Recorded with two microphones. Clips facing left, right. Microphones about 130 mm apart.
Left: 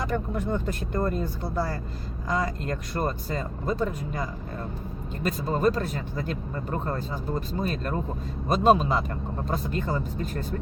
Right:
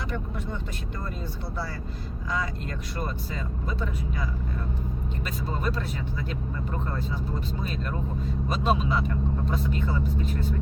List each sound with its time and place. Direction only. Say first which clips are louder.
0.0 s speech: left 5 dB; 45° left (ahead or behind)